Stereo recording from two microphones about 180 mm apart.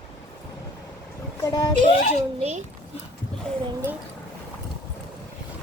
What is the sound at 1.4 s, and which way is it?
Speech, 20° left (ahead or behind).